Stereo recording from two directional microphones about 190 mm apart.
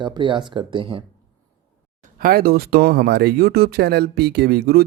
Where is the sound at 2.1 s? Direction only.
50° right (ahead or behind).